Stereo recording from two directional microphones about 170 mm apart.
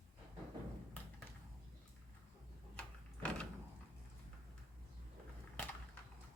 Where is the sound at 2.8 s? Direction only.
5° left (ahead or behind).